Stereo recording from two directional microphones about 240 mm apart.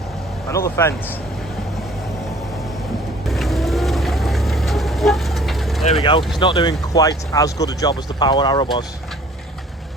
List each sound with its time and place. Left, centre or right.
0.5 s speech: centre
3.2 s vehicle: centre
5.8 s speech: left